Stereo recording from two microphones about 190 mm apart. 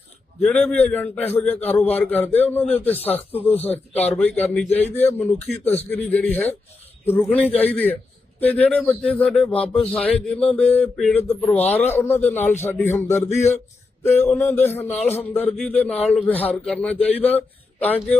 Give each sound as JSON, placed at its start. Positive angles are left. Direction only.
{"t": 0.4, "sound": "a man's voice", "side_deg": 5}